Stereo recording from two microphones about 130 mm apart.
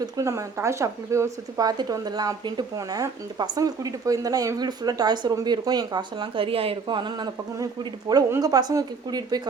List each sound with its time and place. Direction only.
0.0 s speech: 25° right (ahead or behind)